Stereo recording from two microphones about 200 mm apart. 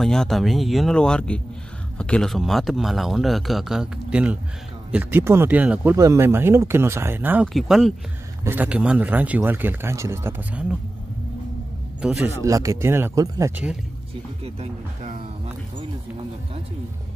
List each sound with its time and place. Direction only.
0.0 s speech: centre (ahead or behind)
12.0 s speech: 5° right (ahead or behind)
12.4 s speech: 15° right (ahead or behind)
14.4 s speech: 30° right (ahead or behind)